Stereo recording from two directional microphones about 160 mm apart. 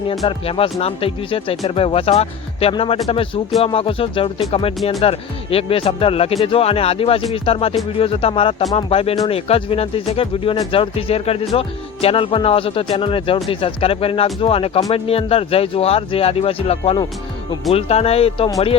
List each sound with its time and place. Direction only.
0.3 s speech: 35° left (ahead or behind)